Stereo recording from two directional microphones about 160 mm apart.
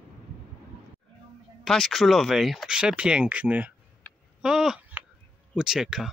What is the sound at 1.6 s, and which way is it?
Speech, centre (ahead or behind).